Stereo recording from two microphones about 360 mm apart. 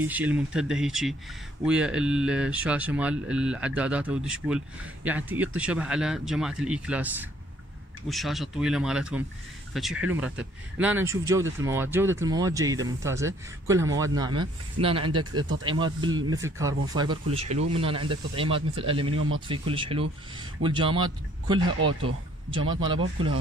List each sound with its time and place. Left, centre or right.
0.0 s a man's voice: centre
21.7 s speech: right
22.5 s a man's voice: centre